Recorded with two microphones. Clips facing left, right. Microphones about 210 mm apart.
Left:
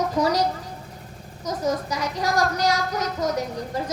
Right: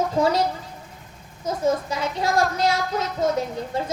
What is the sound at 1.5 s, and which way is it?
A child's voice, 25° right (ahead or behind).